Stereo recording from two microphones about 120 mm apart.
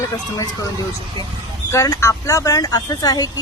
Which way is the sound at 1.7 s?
25° left (ahead or behind).